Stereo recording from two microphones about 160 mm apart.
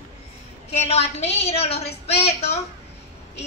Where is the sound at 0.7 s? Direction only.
40° left (ahead or behind).